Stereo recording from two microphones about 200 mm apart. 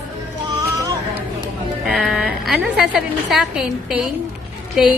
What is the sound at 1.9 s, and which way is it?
A woman's voice, centre (ahead or behind).